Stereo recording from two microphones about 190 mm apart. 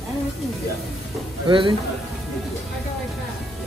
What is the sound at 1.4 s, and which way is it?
Speech, 25° right (ahead or behind).